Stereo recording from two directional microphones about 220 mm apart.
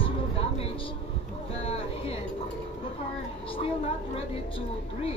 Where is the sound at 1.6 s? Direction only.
25° left (ahead or behind).